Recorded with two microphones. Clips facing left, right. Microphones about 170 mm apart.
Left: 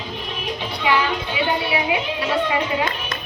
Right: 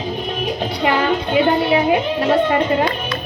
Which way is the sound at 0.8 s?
50° right (ahead or behind).